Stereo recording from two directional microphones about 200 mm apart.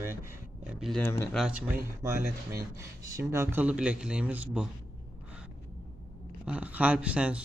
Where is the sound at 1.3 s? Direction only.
5° right (ahead or behind).